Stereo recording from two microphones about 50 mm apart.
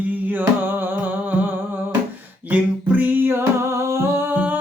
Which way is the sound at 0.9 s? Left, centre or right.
Right.